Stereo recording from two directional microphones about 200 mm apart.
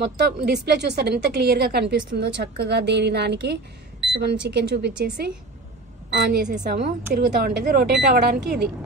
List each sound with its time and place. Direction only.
0.4 s a woman's voice: 55° right (ahead or behind)